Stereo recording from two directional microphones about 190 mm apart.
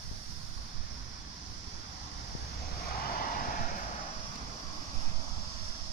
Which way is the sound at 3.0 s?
50° left (ahead or behind).